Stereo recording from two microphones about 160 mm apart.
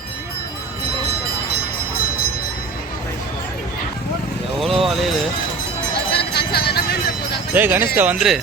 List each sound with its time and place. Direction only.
4.8 s wind chime: centre (ahead or behind)
6.1 s jingle bell: 90° left
7.5 s speech: 10° right (ahead or behind)